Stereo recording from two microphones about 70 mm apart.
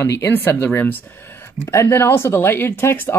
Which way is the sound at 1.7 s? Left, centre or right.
Left.